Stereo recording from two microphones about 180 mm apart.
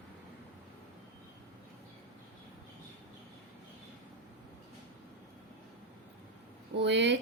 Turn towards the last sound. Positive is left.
turn(degrees=-75)  # may be behind; listen again after turning